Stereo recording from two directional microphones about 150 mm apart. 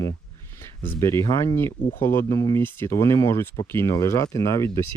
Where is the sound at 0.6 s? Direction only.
15° left (ahead or behind).